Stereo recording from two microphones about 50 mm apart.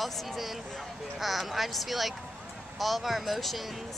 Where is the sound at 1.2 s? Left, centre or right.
Centre.